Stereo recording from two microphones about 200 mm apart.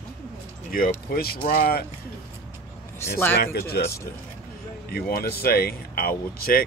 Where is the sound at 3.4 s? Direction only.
50° left (ahead or behind).